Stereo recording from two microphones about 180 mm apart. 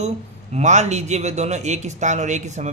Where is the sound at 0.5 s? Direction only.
40° right (ahead or behind).